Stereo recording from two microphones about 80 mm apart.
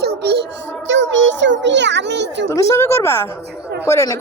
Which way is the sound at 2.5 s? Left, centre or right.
Left.